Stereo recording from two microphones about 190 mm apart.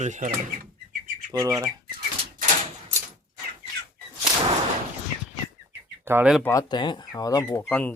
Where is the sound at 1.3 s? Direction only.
15° right (ahead or behind).